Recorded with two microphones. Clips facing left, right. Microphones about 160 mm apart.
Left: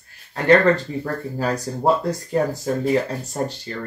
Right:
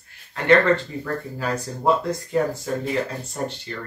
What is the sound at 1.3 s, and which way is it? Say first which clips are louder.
Speech: left 3 dB; 40° left (ahead or behind).